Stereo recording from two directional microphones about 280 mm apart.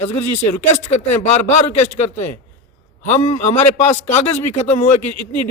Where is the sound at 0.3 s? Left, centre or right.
Left.